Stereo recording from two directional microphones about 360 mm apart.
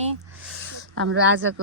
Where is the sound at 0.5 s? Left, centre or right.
Right.